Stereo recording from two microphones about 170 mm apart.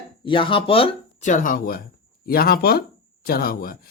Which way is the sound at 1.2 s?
50° left (ahead or behind).